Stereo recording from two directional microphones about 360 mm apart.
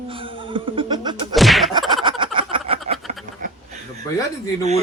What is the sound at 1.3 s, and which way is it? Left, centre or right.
Slap, centre.